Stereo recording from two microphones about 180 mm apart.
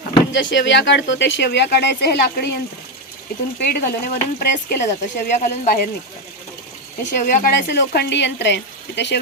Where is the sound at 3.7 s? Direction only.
60° left (ahead or behind).